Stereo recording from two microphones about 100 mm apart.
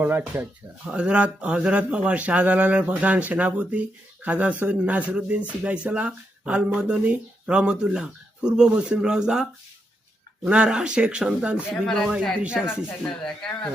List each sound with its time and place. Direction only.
0.0 s speech: 20° right (ahead or behind)
0.9 s a man's voice: 10° right (ahead or behind)
11.7 s speech: 5° left (ahead or behind)
12.1 s a man's voice: 10° right (ahead or behind)